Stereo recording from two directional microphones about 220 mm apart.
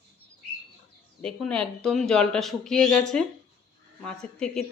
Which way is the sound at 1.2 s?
5° left (ahead or behind).